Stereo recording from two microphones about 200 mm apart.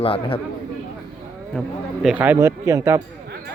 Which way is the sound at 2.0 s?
10° right (ahead or behind).